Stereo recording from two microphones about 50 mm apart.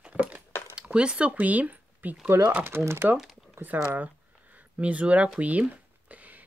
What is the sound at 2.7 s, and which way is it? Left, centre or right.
Speech, right.